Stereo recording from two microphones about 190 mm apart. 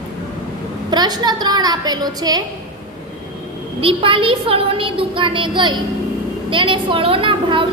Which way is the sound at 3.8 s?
30° right (ahead or behind).